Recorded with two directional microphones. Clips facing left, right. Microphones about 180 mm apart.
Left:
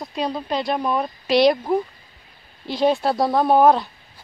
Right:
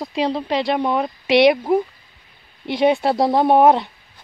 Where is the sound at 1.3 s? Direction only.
65° right (ahead or behind).